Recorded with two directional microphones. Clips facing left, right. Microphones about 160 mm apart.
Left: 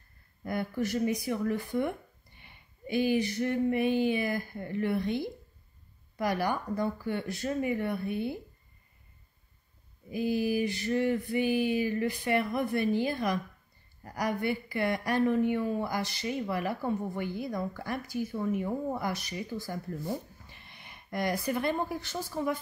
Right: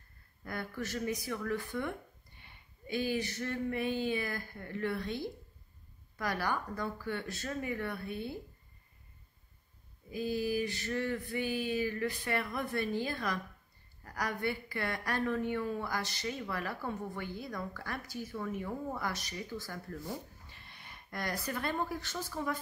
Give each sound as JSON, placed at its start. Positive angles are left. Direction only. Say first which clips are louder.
{"t": 0.4, "sound": "speech", "louder": "left 8 dB", "side_deg": 15}
{"t": 10.1, "sound": "speech", "louder": "left 5 dB", "side_deg": 15}